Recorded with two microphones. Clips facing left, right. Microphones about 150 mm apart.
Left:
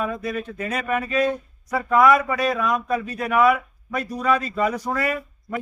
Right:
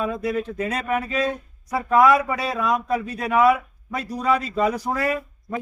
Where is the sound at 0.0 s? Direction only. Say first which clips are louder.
Right 2 dB; 20° right (ahead or behind).